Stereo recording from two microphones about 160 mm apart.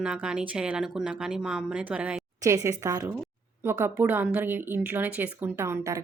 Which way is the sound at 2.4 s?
20° right (ahead or behind).